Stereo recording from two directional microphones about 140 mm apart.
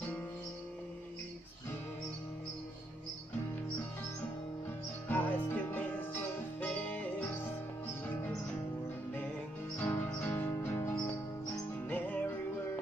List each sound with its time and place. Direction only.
5.0 s music: 15° left (ahead or behind)
9.8 s music: 10° left (ahead or behind)